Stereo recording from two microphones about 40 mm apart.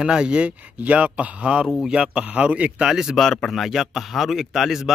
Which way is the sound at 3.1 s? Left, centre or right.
Centre.